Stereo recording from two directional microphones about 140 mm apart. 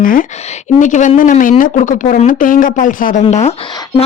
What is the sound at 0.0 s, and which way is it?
Speech, 80° left.